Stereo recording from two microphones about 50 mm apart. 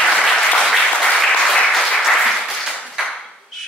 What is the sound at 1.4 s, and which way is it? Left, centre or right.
Applause, centre.